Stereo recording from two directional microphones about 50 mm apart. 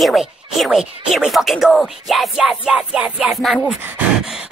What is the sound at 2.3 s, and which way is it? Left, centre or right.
Music, centre.